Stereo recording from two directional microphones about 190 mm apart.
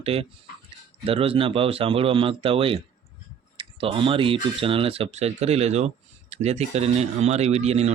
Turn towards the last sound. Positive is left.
turn(degrees=-35)  # may be behind; listen again after turning